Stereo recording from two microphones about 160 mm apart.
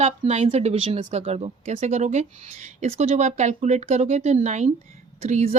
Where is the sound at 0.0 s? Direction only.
40° right (ahead or behind).